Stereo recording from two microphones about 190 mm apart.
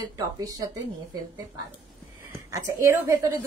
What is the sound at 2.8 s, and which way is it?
Speech, 15° right (ahead or behind).